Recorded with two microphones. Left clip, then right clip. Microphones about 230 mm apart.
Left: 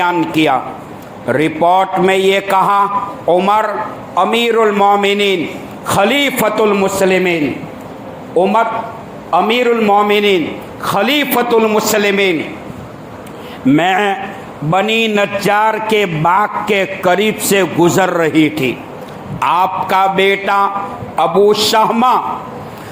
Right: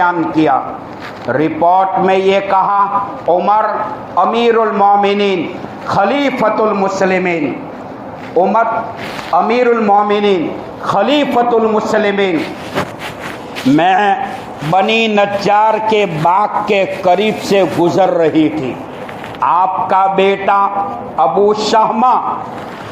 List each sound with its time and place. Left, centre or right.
1.3 s a man's voice: left
6.8 s a man's voice: left
8.4 s a man's voice: left
9.3 s a man's voice: left
13.7 s a man's voice: left